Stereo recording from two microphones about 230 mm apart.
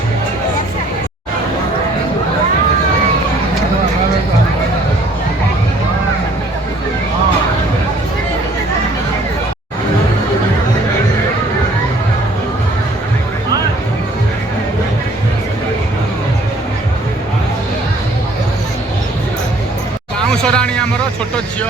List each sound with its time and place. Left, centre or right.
20.3 s vehicle: centre